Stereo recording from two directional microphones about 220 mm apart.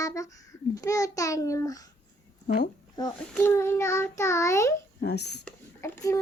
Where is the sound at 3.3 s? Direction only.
10° left (ahead or behind).